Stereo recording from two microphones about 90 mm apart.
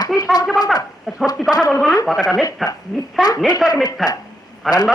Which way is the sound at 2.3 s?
Centre (ahead or behind).